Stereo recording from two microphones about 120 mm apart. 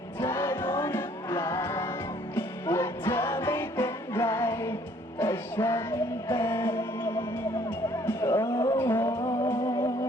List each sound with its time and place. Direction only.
0.2 s music: 20° left (ahead or behind)